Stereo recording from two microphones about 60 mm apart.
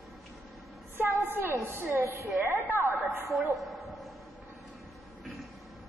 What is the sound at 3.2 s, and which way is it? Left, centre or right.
Speech, right.